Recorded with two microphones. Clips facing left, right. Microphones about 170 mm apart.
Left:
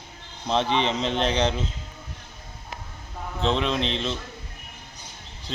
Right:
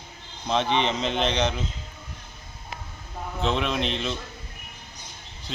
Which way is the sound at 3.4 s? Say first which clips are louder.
Left 1 dB; 5° right (ahead or behind).